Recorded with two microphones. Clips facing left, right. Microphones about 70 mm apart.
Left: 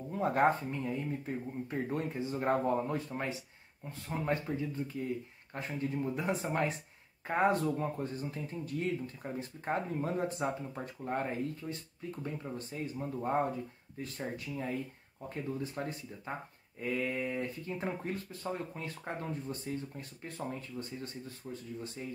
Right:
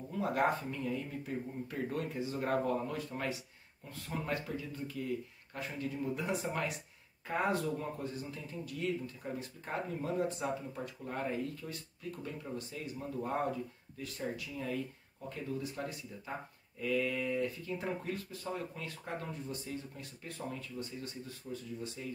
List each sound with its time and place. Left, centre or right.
0.1 s speech: left